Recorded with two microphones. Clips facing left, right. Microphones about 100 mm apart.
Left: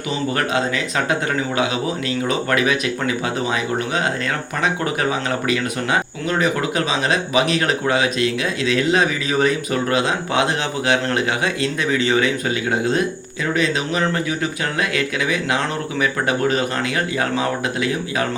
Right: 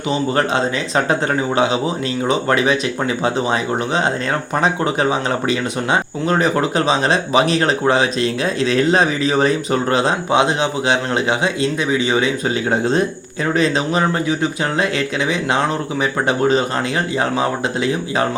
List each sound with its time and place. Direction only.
0.3 s a man's voice: 30° right (ahead or behind)
10.3 s a man's voice: 20° right (ahead or behind)
12.7 s a man's voice: 35° right (ahead or behind)